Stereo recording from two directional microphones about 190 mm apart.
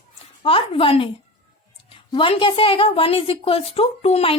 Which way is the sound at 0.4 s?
30° left (ahead or behind).